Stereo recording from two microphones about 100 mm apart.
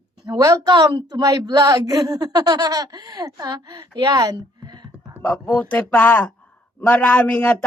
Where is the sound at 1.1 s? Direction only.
35° right (ahead or behind).